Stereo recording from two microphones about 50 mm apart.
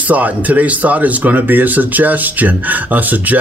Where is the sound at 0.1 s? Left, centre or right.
Right.